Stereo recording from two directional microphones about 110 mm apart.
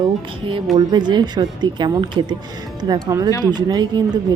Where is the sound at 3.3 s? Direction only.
25° left (ahead or behind).